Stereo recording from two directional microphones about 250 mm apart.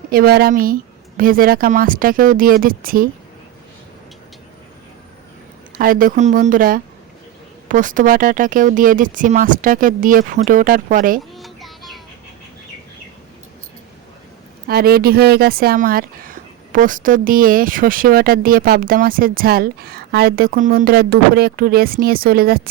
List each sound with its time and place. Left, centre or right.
0.1 s speech: right
5.7 s speech: right
11.3 s a sound: centre
14.7 s speech: right